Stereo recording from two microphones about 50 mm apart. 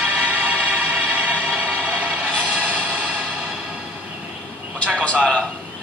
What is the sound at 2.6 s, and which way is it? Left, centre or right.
Music, right.